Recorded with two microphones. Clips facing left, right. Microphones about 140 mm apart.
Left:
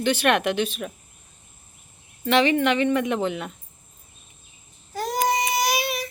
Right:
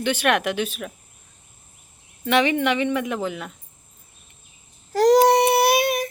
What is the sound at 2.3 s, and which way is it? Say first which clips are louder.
Speech: even; 10° right (ahead or behind).